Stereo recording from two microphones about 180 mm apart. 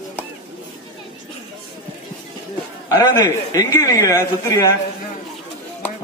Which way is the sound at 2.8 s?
20° left (ahead or behind).